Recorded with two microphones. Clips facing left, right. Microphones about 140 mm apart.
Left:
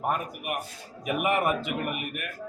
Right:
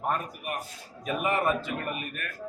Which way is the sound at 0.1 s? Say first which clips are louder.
Even; 15° left (ahead or behind).